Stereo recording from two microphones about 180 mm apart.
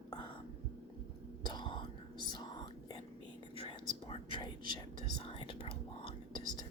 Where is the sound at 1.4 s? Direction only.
25° left (ahead or behind).